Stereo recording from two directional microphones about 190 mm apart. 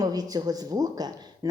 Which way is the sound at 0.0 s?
20° right (ahead or behind).